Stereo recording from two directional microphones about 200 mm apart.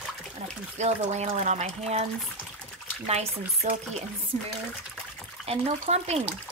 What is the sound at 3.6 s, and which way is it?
Speech, 40° right (ahead or behind).